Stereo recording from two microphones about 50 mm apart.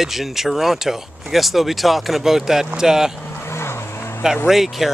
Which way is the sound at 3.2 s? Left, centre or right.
Left.